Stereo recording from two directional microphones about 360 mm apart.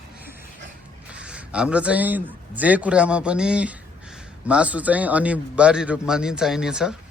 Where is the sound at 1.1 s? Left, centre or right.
Centre.